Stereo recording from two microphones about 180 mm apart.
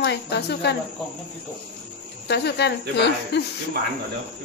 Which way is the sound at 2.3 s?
70° left (ahead or behind).